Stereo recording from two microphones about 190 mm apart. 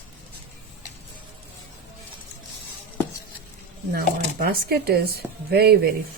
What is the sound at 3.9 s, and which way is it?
Speech, 50° right (ahead or behind).